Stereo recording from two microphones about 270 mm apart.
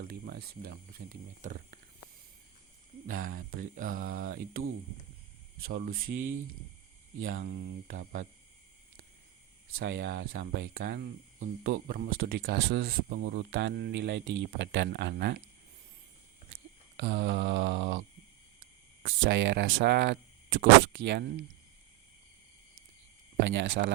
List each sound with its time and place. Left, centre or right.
0.1 s speech: right
3.1 s speech: right
5.6 s speech: right
7.3 s a sound: right
9.7 s speech: right
17.0 s speech: right
19.0 s speech: right
23.5 s speech: right